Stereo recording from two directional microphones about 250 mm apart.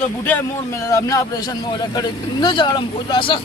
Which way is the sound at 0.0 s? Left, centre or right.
Centre.